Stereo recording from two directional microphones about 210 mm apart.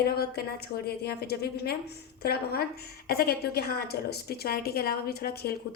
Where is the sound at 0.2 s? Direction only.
50° left (ahead or behind).